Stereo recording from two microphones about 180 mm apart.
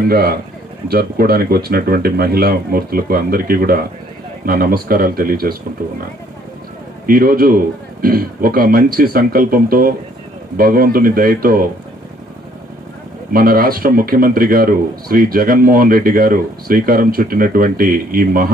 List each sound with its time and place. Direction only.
0.1 s speech: 60° right (ahead or behind)
7.1 s a man's voice: 55° right (ahead or behind)
13.3 s a man's voice: 55° right (ahead or behind)